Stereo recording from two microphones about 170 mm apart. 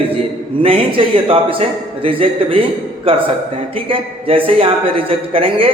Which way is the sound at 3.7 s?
30° right (ahead or behind).